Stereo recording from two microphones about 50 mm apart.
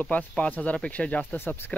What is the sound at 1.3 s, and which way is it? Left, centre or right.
Speech, left.